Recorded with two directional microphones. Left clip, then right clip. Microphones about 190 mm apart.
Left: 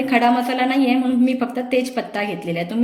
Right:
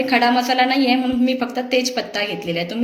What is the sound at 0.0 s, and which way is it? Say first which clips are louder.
A woman's voice: right 1 dB; 45° left (ahead or behind).